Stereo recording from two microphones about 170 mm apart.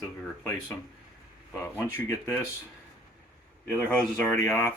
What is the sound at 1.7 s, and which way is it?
Speech, 15° left (ahead or behind).